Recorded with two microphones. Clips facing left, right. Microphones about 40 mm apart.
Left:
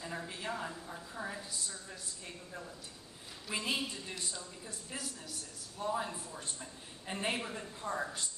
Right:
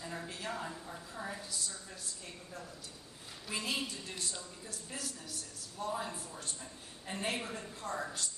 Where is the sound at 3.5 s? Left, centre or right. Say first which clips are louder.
Left 1 dB; centre.